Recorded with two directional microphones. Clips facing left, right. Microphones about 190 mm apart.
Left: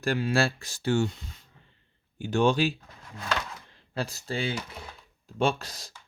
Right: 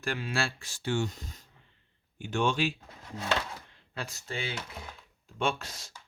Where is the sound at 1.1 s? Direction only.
40° right (ahead or behind).